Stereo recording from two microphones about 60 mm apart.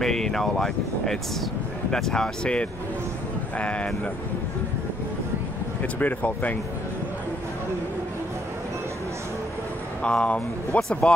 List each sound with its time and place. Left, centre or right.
0.0 s speech: centre
5.8 s speech: left
10.0 s speech: centre